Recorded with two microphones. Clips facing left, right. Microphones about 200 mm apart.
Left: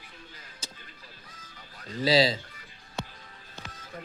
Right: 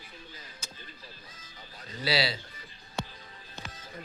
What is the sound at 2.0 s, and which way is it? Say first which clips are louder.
Speech: left 7 dB; 40° left (ahead or behind).